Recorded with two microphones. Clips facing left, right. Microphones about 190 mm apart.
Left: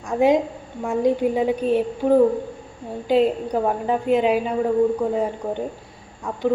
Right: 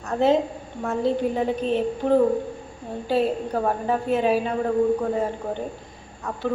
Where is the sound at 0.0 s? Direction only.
10° left (ahead or behind).